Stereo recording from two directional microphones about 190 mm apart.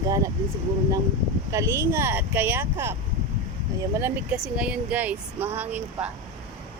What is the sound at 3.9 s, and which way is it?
Speech, 10° right (ahead or behind).